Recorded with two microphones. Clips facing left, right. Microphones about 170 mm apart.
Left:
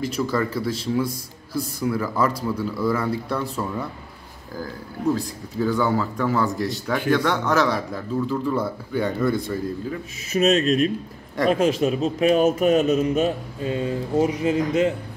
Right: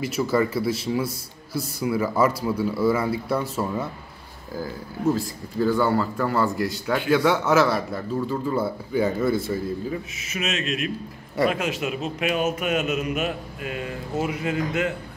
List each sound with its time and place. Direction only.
0.0 s a man's voice: 10° right (ahead or behind)
10.3 s a man's voice: 35° left (ahead or behind)